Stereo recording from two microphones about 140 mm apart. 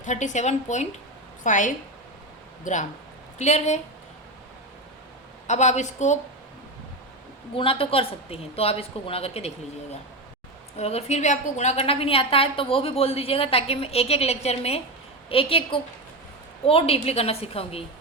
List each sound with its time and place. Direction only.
0.0 s a woman's voice: 60° left (ahead or behind)
5.5 s speech: 55° left (ahead or behind)
7.5 s a woman's voice: 40° left (ahead or behind)
10.8 s a woman's voice: 50° left (ahead or behind)